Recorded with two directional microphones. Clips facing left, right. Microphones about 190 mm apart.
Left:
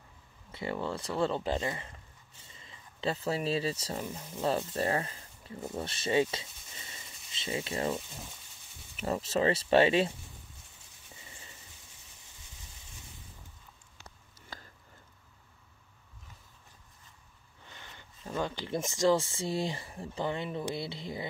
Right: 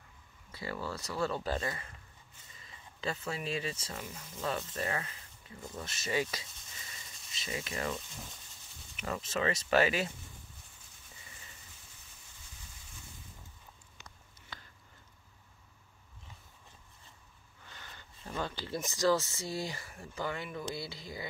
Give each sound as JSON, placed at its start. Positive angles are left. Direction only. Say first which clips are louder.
{"t": 0.5, "sound": "speech", "louder": "left 5 dB", "side_deg": 25}
{"t": 17.6, "sound": "speech", "louder": "left 1 dB", "side_deg": 20}